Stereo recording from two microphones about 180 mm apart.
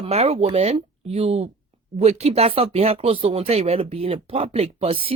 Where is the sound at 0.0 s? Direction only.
35° right (ahead or behind).